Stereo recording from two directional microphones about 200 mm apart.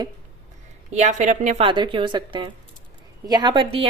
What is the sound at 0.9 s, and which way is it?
Speech, 35° right (ahead or behind).